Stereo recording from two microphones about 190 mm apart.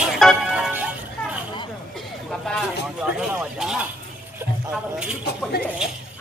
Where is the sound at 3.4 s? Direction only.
5° right (ahead or behind).